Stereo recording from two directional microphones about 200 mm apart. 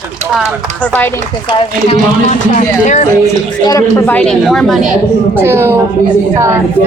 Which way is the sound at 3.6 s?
15° left (ahead or behind).